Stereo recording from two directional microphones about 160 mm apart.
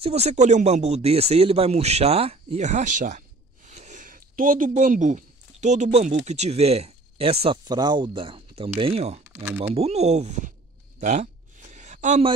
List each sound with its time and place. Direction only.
0.0 s speech: 40° right (ahead or behind)
9.3 s speech: 15° right (ahead or behind)
9.8 s speech: 40° right (ahead or behind)
11.0 s a sound: 45° right (ahead or behind)